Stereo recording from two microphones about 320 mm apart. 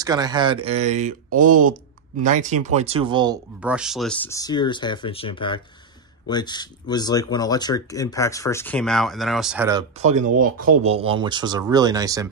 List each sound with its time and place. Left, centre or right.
0.0 s speech: centre